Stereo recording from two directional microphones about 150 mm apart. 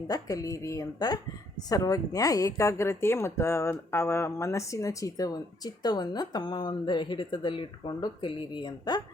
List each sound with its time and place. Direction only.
0.1 s speech: 25° left (ahead or behind)